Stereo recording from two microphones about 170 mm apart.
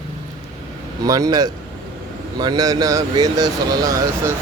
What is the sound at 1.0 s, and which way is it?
Speech, 20° right (ahead or behind).